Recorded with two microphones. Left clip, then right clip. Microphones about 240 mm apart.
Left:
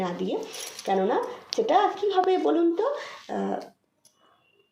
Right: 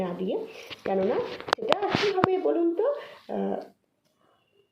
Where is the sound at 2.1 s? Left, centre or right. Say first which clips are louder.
Left 2 dB; left.